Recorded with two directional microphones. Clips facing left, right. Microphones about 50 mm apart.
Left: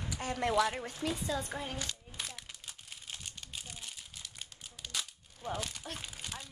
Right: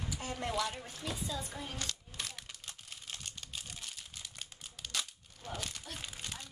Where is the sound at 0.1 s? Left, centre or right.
Left.